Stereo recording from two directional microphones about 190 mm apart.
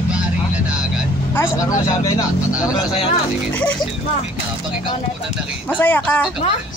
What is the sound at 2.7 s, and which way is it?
Speech, 30° left (ahead or behind).